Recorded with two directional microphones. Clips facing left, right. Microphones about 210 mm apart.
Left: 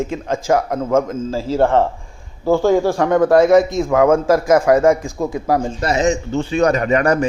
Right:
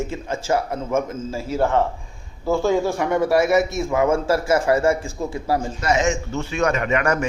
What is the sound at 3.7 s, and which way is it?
Speech, 90° left.